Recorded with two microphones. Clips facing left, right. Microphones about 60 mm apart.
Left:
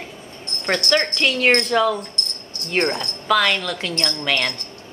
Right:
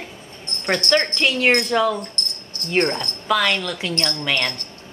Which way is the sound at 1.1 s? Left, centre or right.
Centre.